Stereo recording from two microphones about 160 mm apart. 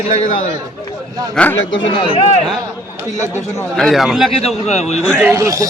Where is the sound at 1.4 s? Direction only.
5° left (ahead or behind).